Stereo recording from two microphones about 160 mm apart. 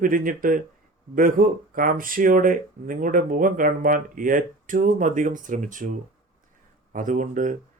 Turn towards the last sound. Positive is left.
turn(degrees=-55)  # may be behind; listen again after turning